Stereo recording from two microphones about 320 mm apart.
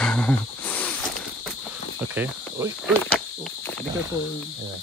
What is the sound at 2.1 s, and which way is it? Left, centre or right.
Cricket, centre.